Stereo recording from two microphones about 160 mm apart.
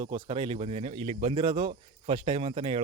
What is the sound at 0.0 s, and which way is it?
Speech, 35° right (ahead or behind).